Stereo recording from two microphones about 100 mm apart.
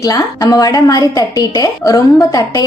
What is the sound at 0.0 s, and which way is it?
A woman's voice, 35° left (ahead or behind).